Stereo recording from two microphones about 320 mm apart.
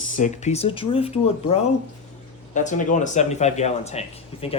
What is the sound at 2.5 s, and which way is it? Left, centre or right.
Speech, left.